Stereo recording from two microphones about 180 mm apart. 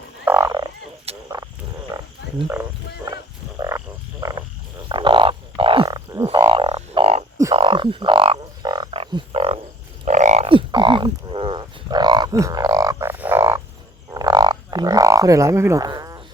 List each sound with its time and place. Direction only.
0.3 s frog: 15° right (ahead or behind)
1.1 s a sound: 35° right (ahead or behind)
1.9 s frog: 20° right (ahead or behind)
2.5 s wild animals: 15° right (ahead or behind)
3.6 s frog: 20° right (ahead or behind)
7.5 s music: 30° right (ahead or behind)
10.1 s a sound: 40° right (ahead or behind)
10.7 s livestock: 25° right (ahead or behind)
14.1 s didgeridoo: 20° right (ahead or behind)